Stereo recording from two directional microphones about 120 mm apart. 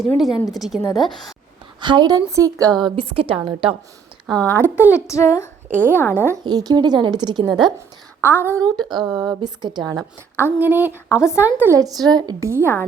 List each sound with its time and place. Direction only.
0.0 s speech: centre (ahead or behind)
1.8 s a woman's voice: 40° right (ahead or behind)
4.4 s speech: 20° right (ahead or behind)
4.9 s speech: 25° left (ahead or behind)
6.4 s a woman's voice: 35° right (ahead or behind)
8.2 s speech: 15° right (ahead or behind)
8.8 s speech: centre (ahead or behind)
9.1 s a woman's voice: 35° right (ahead or behind)
10.3 s speech: 15° right (ahead or behind)
11.1 s speech: 25° left (ahead or behind)
11.4 s speech: 15° right (ahead or behind)
11.8 s a woman's voice: 30° right (ahead or behind)
12.5 s a woman's voice: 20° right (ahead or behind)